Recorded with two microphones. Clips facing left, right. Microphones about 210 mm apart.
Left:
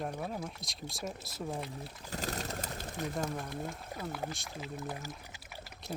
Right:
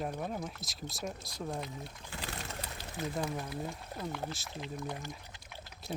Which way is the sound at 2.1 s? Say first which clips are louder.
Left 5 dB; 40° left (ahead or behind).